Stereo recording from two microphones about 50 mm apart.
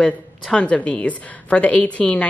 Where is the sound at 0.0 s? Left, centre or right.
Left.